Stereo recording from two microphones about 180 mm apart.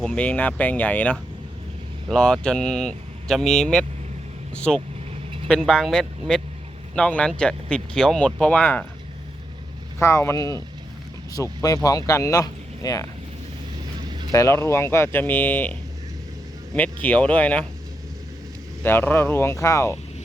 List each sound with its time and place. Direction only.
0.0 s speech: 5° left (ahead or behind)
5.1 s vehicle: 35° right (ahead or behind)
5.5 s speech: 5° left (ahead or behind)
10.0 s speech: 15° left (ahead or behind)
14.1 s vehicle: 25° right (ahead or behind)
14.3 s speech: 15° left (ahead or behind)
18.8 s speech: 10° left (ahead or behind)